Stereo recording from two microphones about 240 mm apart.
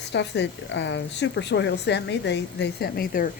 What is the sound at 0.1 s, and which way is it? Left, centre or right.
A woman's voice, left.